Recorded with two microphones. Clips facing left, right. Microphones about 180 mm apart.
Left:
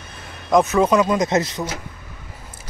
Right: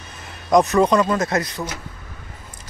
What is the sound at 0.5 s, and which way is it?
Speech, centre (ahead or behind).